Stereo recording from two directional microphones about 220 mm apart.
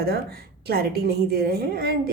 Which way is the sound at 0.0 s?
45° right (ahead or behind).